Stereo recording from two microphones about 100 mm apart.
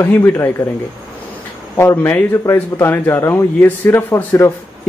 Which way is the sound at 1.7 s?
25° left (ahead or behind).